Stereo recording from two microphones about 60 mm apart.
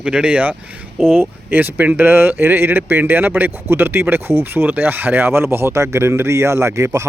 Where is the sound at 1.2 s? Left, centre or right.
Right.